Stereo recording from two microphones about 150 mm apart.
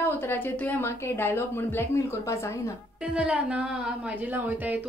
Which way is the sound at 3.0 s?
5° right (ahead or behind).